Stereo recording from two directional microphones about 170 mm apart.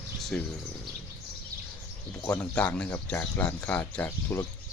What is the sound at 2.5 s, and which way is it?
Speech, 5° left (ahead or behind).